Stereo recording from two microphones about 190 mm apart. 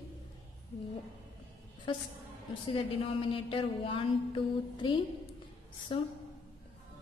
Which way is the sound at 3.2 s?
30° left (ahead or behind).